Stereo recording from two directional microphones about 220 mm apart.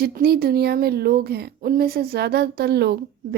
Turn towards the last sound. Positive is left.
turn(degrees=-50)  # may be behind; listen again after turning